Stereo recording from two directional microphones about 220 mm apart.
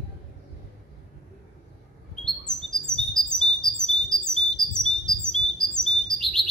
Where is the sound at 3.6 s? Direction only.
Centre (ahead or behind).